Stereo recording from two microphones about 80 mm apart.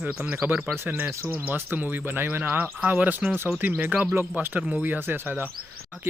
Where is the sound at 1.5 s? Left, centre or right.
Right.